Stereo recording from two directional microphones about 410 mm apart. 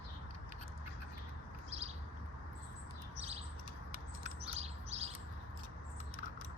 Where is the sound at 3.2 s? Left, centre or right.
Centre.